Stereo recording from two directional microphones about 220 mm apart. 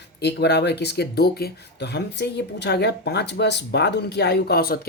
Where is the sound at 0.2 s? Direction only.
50° left (ahead or behind).